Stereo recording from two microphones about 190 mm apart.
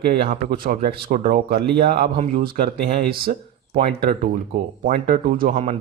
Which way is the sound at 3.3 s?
40° right (ahead or behind).